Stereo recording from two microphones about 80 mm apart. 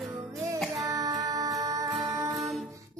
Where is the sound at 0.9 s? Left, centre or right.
Right.